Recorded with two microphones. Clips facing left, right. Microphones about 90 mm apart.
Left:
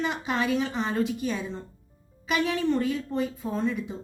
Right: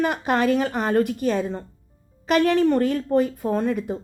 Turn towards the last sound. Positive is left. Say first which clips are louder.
# right 6 dB
turn(degrees=-55)  # may be behind; listen again after turning